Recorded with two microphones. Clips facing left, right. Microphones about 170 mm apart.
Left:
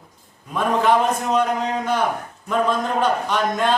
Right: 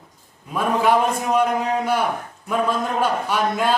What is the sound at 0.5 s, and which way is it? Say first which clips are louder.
A man's voice: even; 10° right (ahead or behind).